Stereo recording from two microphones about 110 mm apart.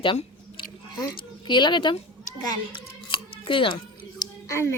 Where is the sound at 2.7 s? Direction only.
50° left (ahead or behind).